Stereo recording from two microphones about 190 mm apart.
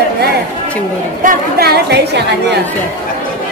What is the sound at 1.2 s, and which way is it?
A woman's voice, 50° right (ahead or behind).